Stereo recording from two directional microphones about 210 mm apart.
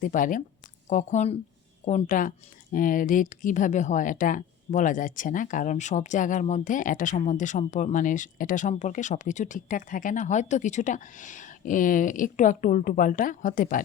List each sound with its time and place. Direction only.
0.0 s speech: 40° left (ahead or behind)